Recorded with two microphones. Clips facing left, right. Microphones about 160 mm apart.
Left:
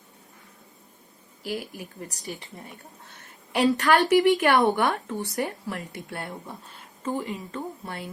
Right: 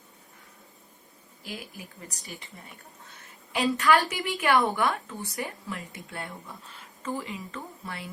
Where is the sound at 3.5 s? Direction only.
45° left (ahead or behind).